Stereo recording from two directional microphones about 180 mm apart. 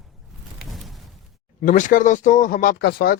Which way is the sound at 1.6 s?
45° left (ahead or behind).